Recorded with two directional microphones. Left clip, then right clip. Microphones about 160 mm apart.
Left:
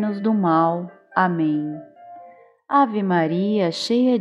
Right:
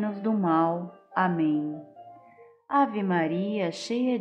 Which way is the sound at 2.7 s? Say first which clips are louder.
Left 6 dB; 30° left (ahead or behind).